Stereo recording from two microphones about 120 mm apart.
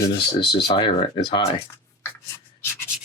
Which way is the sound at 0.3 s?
45° left (ahead or behind).